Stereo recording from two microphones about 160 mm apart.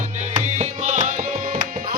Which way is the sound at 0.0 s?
50° right (ahead or behind).